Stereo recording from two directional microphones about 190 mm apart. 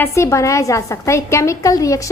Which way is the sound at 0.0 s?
15° left (ahead or behind).